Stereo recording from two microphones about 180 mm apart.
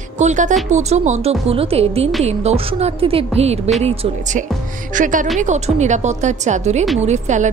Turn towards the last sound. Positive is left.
turn(degrees=-40)  # may be behind; listen again after turning